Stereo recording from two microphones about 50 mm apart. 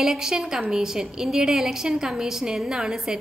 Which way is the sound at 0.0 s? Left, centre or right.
Centre.